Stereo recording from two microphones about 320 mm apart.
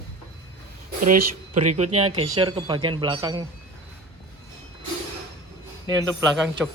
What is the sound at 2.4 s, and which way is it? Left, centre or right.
A man's voice, centre.